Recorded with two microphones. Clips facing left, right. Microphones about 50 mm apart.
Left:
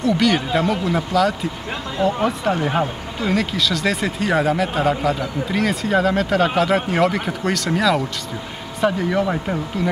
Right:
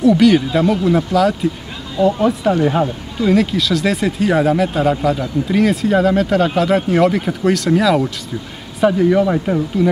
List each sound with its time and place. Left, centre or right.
0.0 s speech: centre
2.0 s speech: centre
2.4 s speech: centre